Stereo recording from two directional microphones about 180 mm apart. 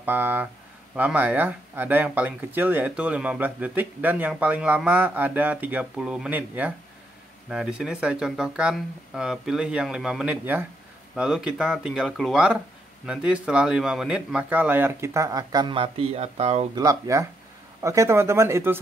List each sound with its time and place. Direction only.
0.0 s speech: 10° right (ahead or behind); by 16.6 s 35° right (ahead or behind)
16.7 s speech: 20° right (ahead or behind)